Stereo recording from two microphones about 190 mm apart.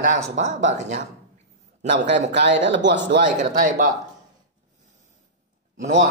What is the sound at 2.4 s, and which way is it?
Speech, 70° right (ahead or behind).